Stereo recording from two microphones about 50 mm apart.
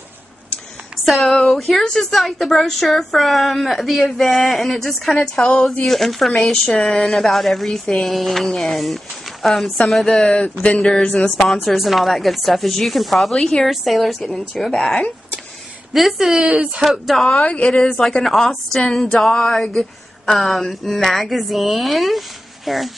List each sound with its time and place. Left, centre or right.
1.0 s speech: centre
1.3 s a woman's voice: centre
5.2 s a woman's voice: centre
11.7 s a woman's voice: centre
13.7 s a woman's voice: centre
15.9 s a woman's voice: centre
16.3 s speech: centre
16.8 s a woman's voice: centre
17.4 s a woman's voice: centre
18.0 s a woman's voice: centre